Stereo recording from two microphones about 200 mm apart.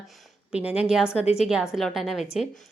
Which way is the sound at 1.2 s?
30° left (ahead or behind).